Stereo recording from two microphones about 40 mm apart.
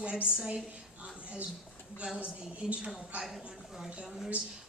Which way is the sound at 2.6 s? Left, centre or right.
Centre.